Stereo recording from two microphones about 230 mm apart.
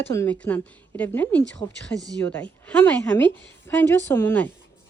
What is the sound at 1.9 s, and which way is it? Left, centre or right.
Speech, centre.